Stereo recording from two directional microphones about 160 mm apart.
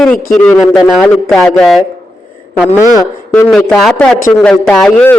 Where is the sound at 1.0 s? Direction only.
5° left (ahead or behind).